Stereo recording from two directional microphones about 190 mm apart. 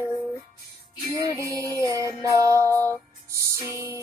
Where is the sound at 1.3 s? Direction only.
15° right (ahead or behind).